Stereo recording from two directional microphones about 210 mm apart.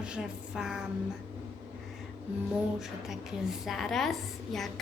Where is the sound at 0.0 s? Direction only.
5° right (ahead or behind).